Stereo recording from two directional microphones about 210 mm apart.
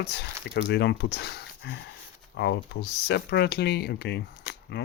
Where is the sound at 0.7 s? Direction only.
55° left (ahead or behind).